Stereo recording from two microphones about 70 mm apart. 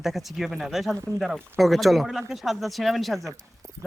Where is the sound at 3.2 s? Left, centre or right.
Right.